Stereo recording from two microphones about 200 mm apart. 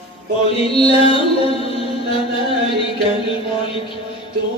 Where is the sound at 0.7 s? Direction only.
30° left (ahead or behind).